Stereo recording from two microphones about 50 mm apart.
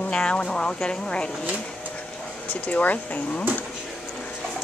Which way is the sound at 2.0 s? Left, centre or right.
Left.